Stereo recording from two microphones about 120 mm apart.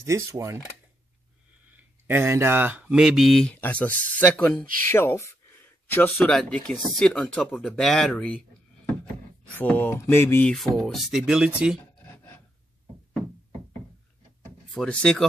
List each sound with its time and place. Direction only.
0.0 s speech: 25° right (ahead or behind)
2.0 s speech: 20° right (ahead or behind); by 3.5 s centre (ahead or behind)
3.6 s speech: 15° left (ahead or behind)
4.9 s mantra: 20° left (ahead or behind)
5.9 s speech: 15° left (ahead or behind)
9.6 s mantra: 15° left (ahead or behind)
10.4 s speech: 5° left (ahead or behind)
11.8 s a sound: 15° left (ahead or behind)
14.7 s speech: 5° left (ahead or behind)